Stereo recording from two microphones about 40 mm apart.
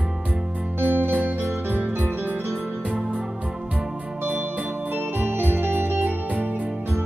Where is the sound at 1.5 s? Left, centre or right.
Right.